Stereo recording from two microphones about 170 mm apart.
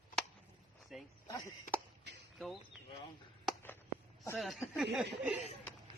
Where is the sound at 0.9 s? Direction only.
Centre (ahead or behind).